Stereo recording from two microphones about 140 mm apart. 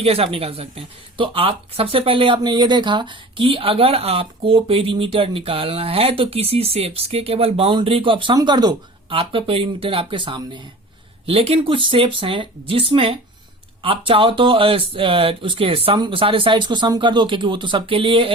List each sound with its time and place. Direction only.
0.0 s speech: 45° right (ahead or behind)